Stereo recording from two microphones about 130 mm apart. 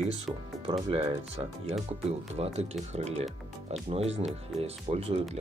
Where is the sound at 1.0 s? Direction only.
55° right (ahead or behind).